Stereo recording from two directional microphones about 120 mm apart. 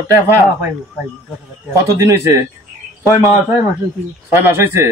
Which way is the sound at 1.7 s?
25° right (ahead or behind).